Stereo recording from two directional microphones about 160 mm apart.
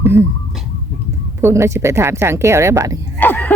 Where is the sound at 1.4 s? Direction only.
15° right (ahead or behind).